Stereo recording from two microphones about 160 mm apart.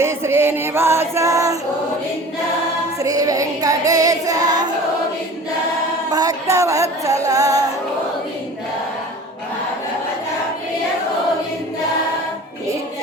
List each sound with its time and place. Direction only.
0.0 s music: 15° right (ahead or behind)
3.0 s music: 20° right (ahead or behind)
6.1 s music: 25° right (ahead or behind)